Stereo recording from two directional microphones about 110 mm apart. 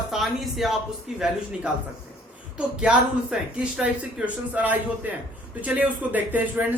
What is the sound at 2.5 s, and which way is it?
Speech, 10° right (ahead or behind).